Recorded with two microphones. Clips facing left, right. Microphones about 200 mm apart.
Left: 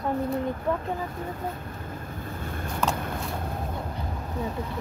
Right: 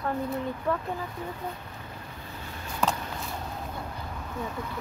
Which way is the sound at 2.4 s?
55° left (ahead or behind).